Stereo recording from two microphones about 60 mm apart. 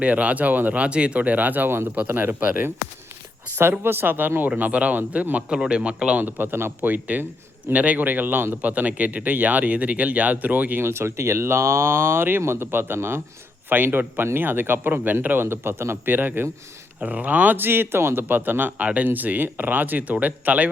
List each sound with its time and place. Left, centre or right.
0.0 s a man's voice: right
3.5 s a man's voice: right
5.5 s speech: centre
6.2 s a man's voice: right
10.8 s a man's voice: right